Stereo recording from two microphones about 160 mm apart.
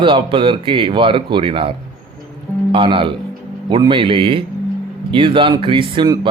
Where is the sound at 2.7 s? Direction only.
35° right (ahead or behind).